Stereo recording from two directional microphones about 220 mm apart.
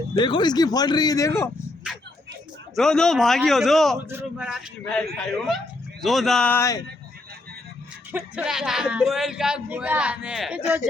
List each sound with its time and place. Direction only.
0.1 s speech: 20° left (ahead or behind)
2.7 s speech: centre (ahead or behind)
3.9 s speech: 10° right (ahead or behind); by 6.8 s 15° left (ahead or behind)
8.1 s speech: 5° right (ahead or behind)